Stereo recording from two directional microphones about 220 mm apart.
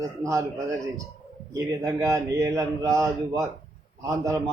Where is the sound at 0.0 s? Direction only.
15° right (ahead or behind).